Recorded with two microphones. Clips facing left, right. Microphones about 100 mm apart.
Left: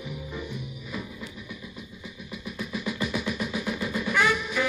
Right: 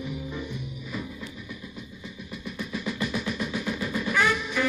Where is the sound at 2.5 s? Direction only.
5° left (ahead or behind).